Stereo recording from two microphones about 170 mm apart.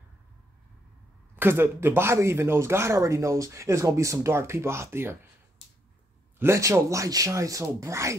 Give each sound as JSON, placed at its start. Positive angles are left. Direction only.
{"t": 1.3, "sound": "speech", "side_deg": -10}
{"t": 6.4, "sound": "speech", "side_deg": -15}